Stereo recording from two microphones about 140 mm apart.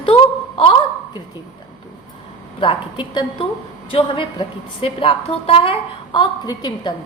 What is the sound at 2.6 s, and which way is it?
A woman's voice, 35° left (ahead or behind).